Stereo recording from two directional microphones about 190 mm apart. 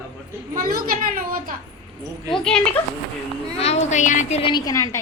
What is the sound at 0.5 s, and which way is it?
A child's voice, 45° right (ahead or behind).